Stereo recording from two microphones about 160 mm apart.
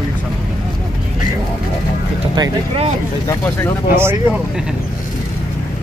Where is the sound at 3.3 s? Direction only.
20° left (ahead or behind).